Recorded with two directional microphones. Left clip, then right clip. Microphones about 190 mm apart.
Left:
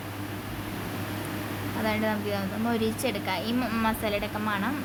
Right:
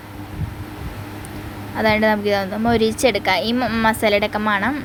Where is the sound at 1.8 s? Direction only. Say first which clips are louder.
Right 13 dB; 40° right (ahead or behind).